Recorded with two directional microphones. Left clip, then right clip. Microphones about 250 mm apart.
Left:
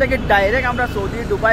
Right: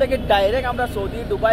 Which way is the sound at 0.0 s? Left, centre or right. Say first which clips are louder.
Left 2 dB; left.